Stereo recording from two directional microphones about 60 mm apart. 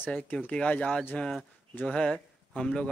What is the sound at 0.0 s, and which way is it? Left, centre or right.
Speech, left.